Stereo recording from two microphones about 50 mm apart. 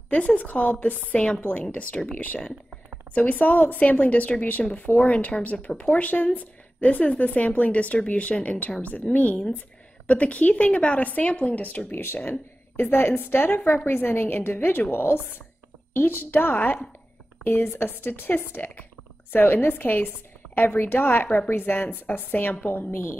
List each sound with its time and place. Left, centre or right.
0.1 s speech: left
1.1 s speech: centre
3.2 s speech: left
11.9 s a woman's voice: left